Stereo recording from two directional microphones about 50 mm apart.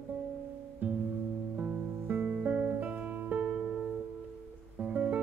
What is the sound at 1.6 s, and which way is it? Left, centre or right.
Music, right.